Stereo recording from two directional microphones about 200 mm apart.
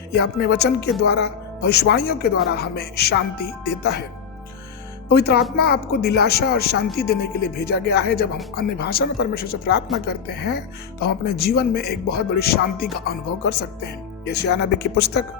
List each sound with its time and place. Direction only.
0.1 s speech: 55° left (ahead or behind)
5.0 s speech: 50° left (ahead or behind)